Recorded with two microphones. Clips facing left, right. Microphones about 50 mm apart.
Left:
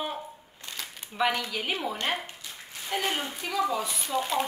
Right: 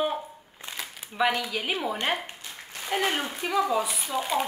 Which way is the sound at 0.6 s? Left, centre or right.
Centre.